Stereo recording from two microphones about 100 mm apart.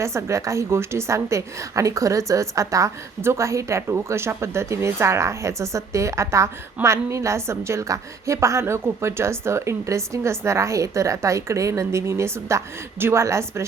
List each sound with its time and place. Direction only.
0.0 s a woman's voice: 30° right (ahead or behind)